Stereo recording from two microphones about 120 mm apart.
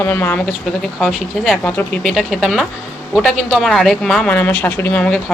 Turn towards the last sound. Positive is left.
turn(degrees=10)  # may be behind; listen again after turning